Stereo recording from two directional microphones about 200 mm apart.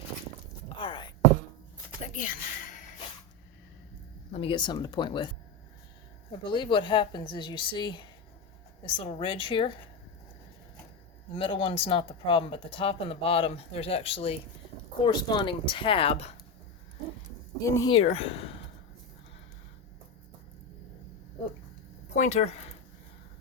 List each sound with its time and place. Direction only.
0.8 s a sound: 25° left (ahead or behind)
2.1 s a sound: 45° left (ahead or behind)
4.3 s speech: 30° left (ahead or behind)
6.4 s speech: 25° left (ahead or behind)
11.3 s speech: 25° left (ahead or behind)
17.7 s speech: 15° left (ahead or behind)
17.9 s speech: 30° left (ahead or behind)
22.1 s speech: 35° left (ahead or behind)